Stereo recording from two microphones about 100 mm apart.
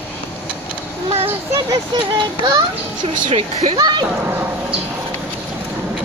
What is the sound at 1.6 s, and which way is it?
Speech, 50° right (ahead or behind).